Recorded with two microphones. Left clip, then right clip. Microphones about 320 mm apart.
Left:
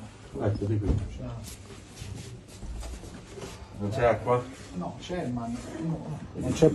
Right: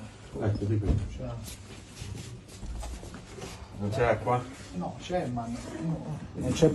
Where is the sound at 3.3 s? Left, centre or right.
Centre.